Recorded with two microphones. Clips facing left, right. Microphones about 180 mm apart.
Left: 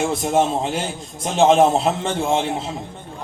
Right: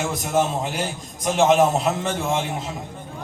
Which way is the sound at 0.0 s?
30° left (ahead or behind).